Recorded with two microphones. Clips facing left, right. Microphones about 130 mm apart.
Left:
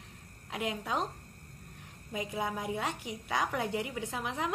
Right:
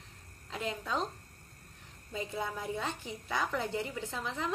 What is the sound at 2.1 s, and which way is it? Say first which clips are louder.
A woman's voice: left 2 dB; 15° left (ahead or behind).